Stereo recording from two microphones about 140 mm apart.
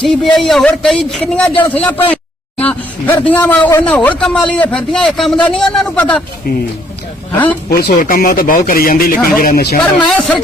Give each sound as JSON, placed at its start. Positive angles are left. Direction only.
{"t": 0.0, "sound": "a man's voice", "side_deg": 5}
{"t": 6.5, "sound": "a man's voice", "side_deg": 90}
{"t": 7.7, "sound": "a man's voice", "side_deg": 80}
{"t": 9.8, "sound": "speech", "side_deg": 5}